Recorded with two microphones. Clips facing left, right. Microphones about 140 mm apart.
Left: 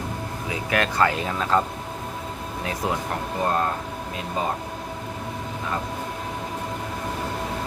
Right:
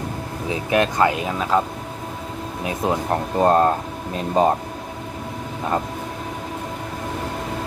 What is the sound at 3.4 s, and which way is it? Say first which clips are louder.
Speech: right 8 dB; 40° right (ahead or behind).